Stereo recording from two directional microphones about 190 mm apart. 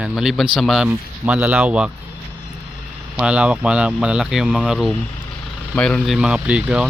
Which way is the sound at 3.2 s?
5° right (ahead or behind).